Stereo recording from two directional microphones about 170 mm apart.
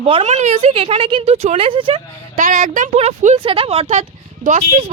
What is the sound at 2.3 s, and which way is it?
A woman's voice, 45° right (ahead or behind).